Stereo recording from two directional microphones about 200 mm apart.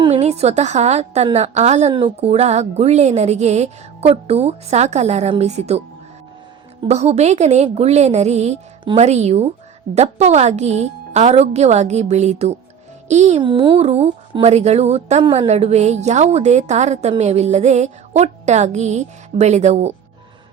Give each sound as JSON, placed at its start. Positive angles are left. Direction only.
{"t": 0.0, "sound": "speech", "side_deg": -30}
{"t": 6.8, "sound": "speech", "side_deg": -35}